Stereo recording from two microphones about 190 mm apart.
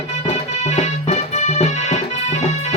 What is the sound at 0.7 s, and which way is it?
Music, 35° left (ahead or behind).